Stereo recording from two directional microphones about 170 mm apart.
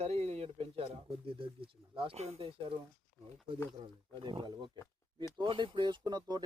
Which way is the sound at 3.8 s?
30° right (ahead or behind).